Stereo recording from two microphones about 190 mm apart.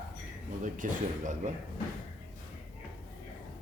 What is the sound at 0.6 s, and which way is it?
Speech, 40° right (ahead or behind).